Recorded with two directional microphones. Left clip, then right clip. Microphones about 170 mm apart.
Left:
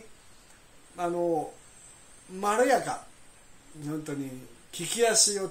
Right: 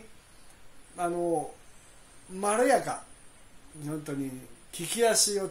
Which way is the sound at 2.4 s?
20° right (ahead or behind).